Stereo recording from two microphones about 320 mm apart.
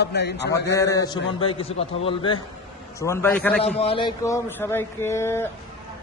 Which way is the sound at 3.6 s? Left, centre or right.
Centre.